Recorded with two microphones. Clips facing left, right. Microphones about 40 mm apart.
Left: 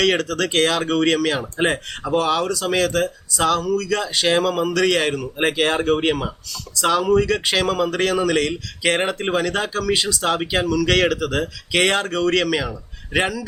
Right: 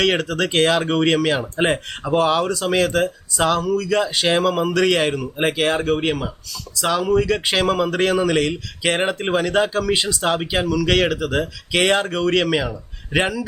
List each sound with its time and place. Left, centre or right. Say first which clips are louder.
0.0 s speech: even; centre
5.5 s speech: left 1 dB; centre